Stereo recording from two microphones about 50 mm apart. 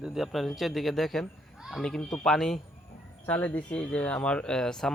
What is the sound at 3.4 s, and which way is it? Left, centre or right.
Speech, left.